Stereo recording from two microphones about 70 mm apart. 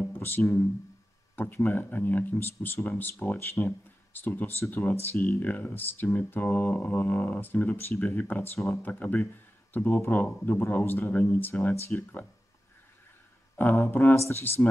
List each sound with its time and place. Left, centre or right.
0.1 s speech: left
13.6 s speech: left
14.1 s speech: left